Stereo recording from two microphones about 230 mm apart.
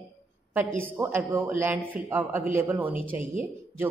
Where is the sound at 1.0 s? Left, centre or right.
Centre.